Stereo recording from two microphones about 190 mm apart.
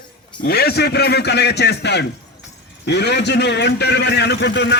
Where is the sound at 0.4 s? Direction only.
55° left (ahead or behind).